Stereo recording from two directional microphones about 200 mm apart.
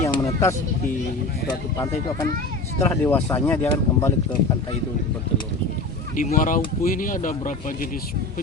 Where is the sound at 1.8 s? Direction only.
15° left (ahead or behind).